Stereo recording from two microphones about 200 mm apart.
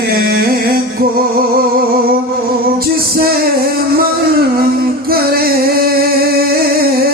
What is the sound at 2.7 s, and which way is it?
Music, 50° right (ahead or behind).